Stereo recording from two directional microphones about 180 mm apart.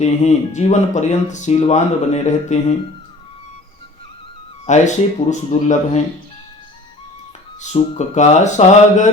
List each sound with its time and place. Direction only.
0.0 s speech: 40° left (ahead or behind)
4.6 s speech: 40° left (ahead or behind)
7.6 s speech: 40° left (ahead or behind)